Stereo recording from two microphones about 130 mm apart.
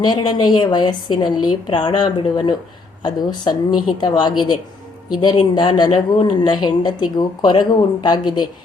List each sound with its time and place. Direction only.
0.0 s speech: 35° left (ahead or behind)